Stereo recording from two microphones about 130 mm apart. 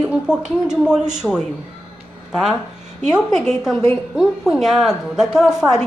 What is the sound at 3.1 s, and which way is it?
A woman's voice, centre (ahead or behind).